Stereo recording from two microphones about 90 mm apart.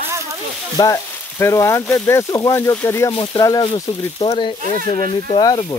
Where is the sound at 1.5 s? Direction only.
35° left (ahead or behind).